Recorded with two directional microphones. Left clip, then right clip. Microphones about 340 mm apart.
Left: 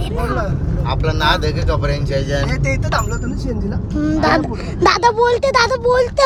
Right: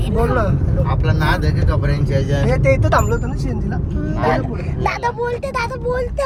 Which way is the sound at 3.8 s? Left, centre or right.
Left.